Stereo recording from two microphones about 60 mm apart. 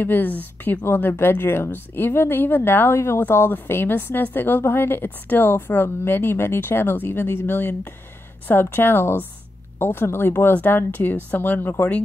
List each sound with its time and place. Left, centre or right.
0.0 s a woman's voice: left